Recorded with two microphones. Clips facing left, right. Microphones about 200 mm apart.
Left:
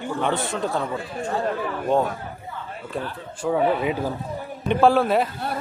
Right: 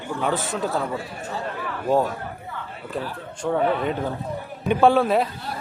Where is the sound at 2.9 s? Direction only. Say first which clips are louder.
Right 1 dB; centre (ahead or behind).